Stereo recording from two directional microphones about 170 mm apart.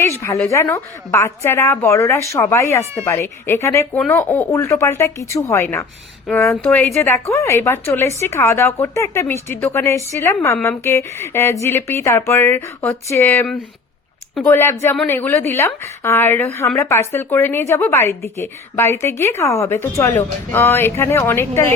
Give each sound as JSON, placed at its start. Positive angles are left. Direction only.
{"t": 0.2, "sound": "a woman's voice", "side_deg": 15}